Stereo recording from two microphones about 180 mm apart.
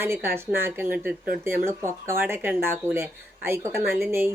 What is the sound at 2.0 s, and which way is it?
Speech, 15° right (ahead or behind).